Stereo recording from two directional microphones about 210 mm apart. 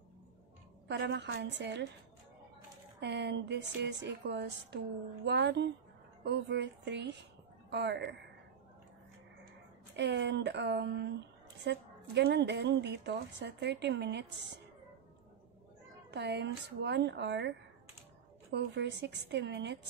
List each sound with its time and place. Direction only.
0.8 s speech: 55° right (ahead or behind)
3.0 s a woman's voice: 55° right (ahead or behind)
9.9 s a woman's voice: 55° right (ahead or behind)
16.1 s speech: 55° right (ahead or behind)
18.5 s speech: 55° right (ahead or behind)